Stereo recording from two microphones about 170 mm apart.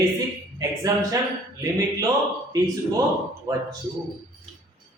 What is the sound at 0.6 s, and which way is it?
Speech, 20° right (ahead or behind).